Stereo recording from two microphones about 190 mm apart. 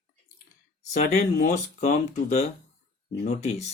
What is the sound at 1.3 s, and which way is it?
Speech, 40° left (ahead or behind).